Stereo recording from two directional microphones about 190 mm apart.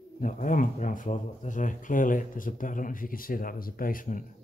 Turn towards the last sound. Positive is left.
turn(degrees=45)  # may be behind; listen again after turning